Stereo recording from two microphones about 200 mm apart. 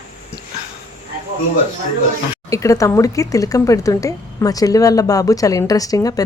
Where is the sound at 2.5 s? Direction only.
15° left (ahead or behind).